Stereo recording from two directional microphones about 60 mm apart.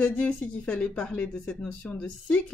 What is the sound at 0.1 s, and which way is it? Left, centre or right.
A woman's voice, centre.